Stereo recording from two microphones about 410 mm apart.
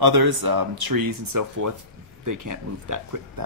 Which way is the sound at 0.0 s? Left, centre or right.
Right.